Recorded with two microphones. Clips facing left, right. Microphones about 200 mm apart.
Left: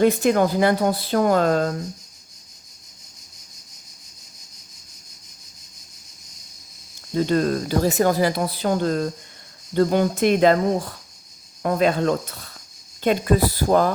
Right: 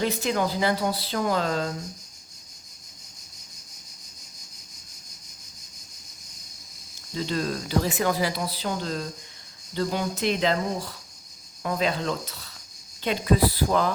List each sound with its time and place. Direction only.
0.0 s speech: 50° left (ahead or behind)
7.1 s speech: 50° left (ahead or behind)